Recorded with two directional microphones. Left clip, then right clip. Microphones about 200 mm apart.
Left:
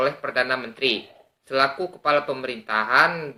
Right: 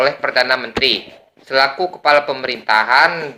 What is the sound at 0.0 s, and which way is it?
Speech, 15° left (ahead or behind).